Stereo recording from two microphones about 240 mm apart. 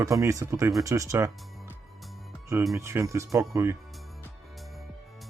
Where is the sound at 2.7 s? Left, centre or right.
Centre.